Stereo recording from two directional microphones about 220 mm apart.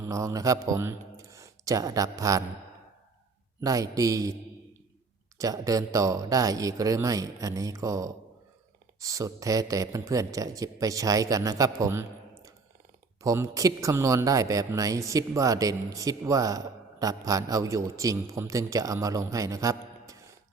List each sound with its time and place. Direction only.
0.0 s speech: 15° right (ahead or behind)
3.6 s speech: 15° right (ahead or behind)
5.4 s speech: 15° right (ahead or behind)
13.2 s speech: 15° right (ahead or behind)